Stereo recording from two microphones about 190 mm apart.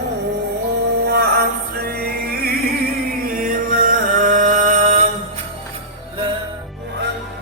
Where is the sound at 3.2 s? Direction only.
45° right (ahead or behind).